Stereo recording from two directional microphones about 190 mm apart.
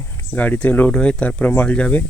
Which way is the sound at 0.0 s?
10° left (ahead or behind).